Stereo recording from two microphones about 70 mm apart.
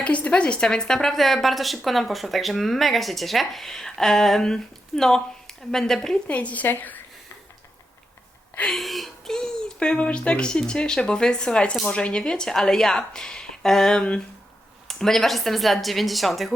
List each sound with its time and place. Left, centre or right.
0.0 s speech: centre
6.2 s a woman's voice: centre
8.7 s a child's voice: centre